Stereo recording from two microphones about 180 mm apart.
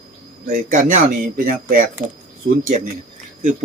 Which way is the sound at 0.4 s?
45° right (ahead or behind).